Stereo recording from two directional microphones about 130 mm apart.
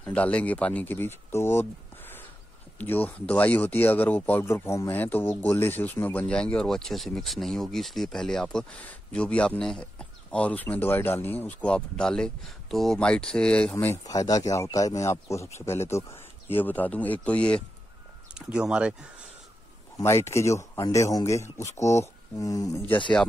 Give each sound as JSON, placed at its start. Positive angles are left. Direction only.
{"t": 0.0, "sound": "speech", "side_deg": 10}
{"t": 14.0, "sound": "speech", "side_deg": 25}
{"t": 18.3, "sound": "speech", "side_deg": -5}
{"t": 20.0, "sound": "speech", "side_deg": 20}
{"t": 22.8, "sound": "speech", "side_deg": 40}